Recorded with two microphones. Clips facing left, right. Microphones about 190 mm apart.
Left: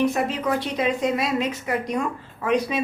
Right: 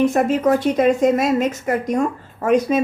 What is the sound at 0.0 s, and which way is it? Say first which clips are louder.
A woman's voice: right 6 dB; 50° right (ahead or behind).